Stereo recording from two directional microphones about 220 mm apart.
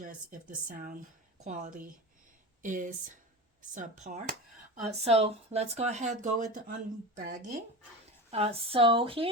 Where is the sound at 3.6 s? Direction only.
35° right (ahead or behind).